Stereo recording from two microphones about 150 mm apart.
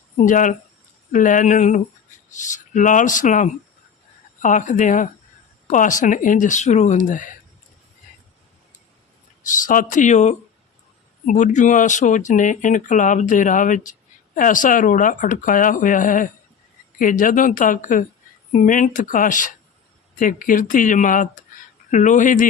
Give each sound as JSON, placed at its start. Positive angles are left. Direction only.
{"t": 0.2, "sound": "speech", "side_deg": 60}
{"t": 9.4, "sound": "speech", "side_deg": 60}